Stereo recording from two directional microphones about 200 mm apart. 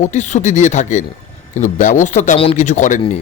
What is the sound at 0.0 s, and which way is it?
A man's voice, 35° left (ahead or behind).